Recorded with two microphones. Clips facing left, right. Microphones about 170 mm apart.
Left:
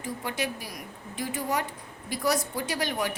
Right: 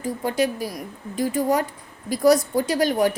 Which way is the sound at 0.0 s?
40° right (ahead or behind).